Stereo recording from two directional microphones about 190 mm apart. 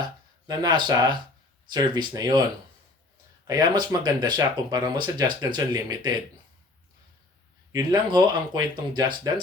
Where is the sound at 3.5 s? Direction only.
20° right (ahead or behind).